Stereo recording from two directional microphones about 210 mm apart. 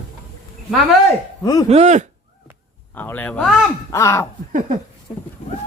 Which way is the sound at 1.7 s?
35° right (ahead or behind).